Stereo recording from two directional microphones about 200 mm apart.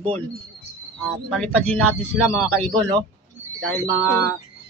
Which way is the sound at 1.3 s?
5° left (ahead or behind).